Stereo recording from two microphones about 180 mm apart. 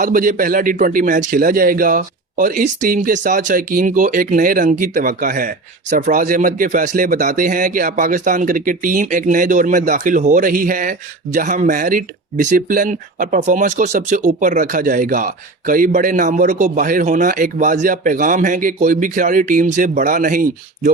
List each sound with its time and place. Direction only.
0.0 s speech: 50° right (ahead or behind)